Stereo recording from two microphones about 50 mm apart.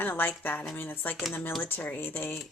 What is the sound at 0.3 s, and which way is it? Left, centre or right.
Speech, left.